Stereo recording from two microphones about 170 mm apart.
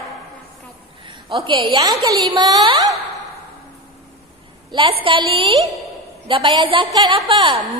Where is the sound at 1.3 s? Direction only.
30° right (ahead or behind).